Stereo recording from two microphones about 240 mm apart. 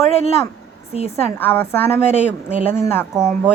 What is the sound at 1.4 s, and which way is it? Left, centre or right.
Speech, centre.